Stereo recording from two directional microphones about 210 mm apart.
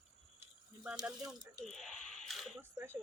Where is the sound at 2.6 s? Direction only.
10° right (ahead or behind).